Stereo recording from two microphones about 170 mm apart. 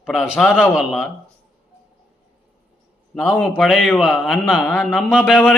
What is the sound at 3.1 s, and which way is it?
A man's voice, centre (ahead or behind).